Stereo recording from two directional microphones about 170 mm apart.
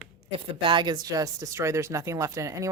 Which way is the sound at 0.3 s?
30° right (ahead or behind).